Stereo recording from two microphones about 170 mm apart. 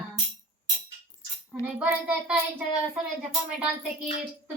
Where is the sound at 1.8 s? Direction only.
5° right (ahead or behind).